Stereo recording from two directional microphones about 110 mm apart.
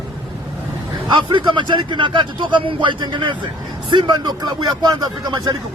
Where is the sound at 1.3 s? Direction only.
45° right (ahead or behind).